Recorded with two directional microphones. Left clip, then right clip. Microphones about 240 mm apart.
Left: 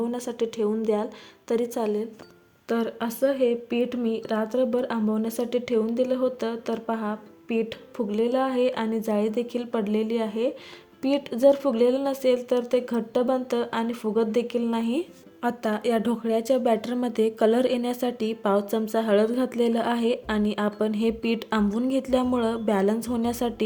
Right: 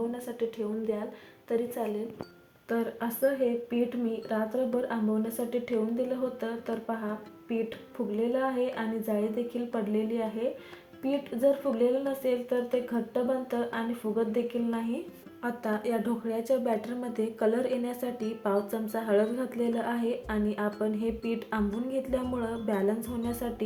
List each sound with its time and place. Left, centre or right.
0.1 s a woman's voice: left